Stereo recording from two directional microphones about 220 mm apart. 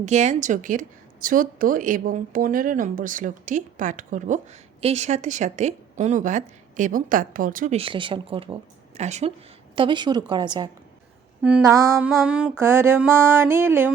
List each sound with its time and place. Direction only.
0.0 s a woman's voice: 30° right (ahead or behind)
11.4 s mantra: 10° right (ahead or behind)